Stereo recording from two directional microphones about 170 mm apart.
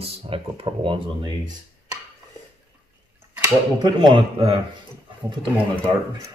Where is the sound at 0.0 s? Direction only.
35° right (ahead or behind).